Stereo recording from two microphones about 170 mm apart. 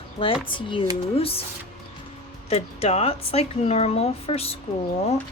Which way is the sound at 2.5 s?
40° left (ahead or behind).